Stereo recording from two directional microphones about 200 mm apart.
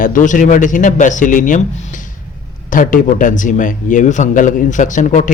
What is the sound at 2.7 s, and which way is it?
Speech, 45° left (ahead or behind).